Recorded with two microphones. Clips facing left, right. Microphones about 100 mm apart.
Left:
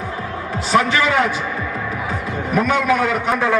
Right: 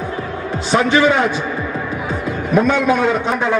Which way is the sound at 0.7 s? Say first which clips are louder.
Right 3 dB; 25° right (ahead or behind).